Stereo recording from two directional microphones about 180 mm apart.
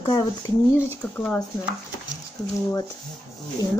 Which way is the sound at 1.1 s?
10° left (ahead or behind).